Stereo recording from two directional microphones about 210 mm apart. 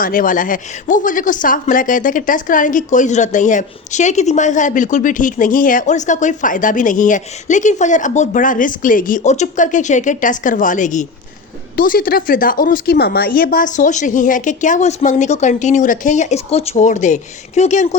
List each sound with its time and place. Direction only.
0.0 s speech: 40° left (ahead or behind)